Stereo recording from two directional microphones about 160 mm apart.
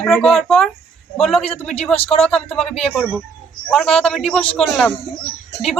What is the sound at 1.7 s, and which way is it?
Speech, 40° left (ahead or behind).